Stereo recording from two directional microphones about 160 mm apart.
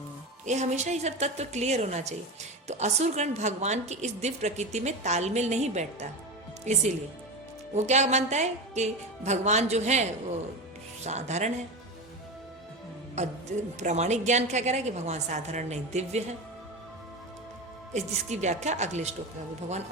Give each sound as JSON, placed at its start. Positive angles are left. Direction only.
{"t": 0.4, "sound": "a woman's voice", "side_deg": -45}
{"t": 13.1, "sound": "a woman's voice", "side_deg": -45}
{"t": 17.9, "sound": "a woman's voice", "side_deg": -45}